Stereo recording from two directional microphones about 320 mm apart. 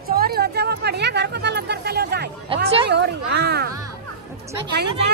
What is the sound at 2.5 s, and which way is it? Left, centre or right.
Speech, centre.